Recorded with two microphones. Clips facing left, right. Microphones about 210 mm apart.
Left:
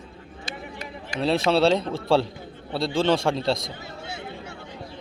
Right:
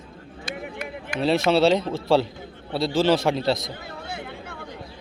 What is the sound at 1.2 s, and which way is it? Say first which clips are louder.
A man's voice: right 1 dB; centre (ahead or behind).